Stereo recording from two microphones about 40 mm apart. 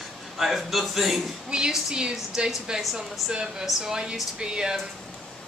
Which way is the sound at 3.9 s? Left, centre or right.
Centre.